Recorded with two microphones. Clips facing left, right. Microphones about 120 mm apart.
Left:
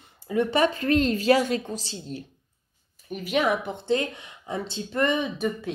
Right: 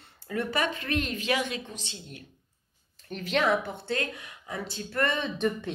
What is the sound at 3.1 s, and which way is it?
A woman's voice, 10° left (ahead or behind).